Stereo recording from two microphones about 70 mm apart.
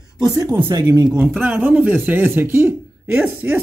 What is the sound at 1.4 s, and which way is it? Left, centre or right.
Speech, right.